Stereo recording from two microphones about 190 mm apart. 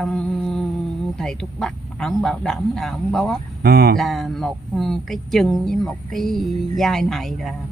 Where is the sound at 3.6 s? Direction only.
55° right (ahead or behind).